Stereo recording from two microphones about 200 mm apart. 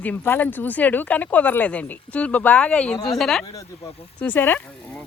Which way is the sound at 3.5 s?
10° left (ahead or behind).